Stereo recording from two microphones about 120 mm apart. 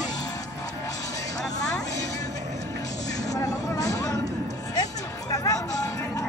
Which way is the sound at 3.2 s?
30° left (ahead or behind).